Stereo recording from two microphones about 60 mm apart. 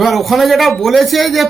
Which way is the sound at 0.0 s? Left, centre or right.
Centre.